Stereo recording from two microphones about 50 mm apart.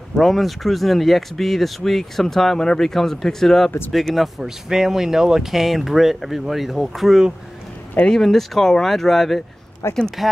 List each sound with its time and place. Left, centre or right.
0.1 s speech: centre
8.0 s speech: centre
9.8 s speech: left